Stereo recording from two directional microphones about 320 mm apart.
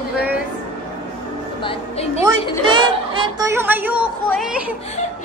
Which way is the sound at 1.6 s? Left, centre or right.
Centre.